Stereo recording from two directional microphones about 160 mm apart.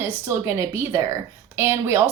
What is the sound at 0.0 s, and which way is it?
A woman's voice, 15° right (ahead or behind).